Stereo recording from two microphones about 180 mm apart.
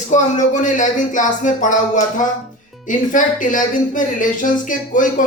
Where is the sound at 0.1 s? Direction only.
45° left (ahead or behind).